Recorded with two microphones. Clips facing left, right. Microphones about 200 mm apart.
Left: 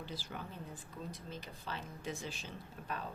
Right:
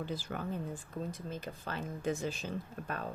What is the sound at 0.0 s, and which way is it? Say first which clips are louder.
Speech: right 7 dB; 50° right (ahead or behind).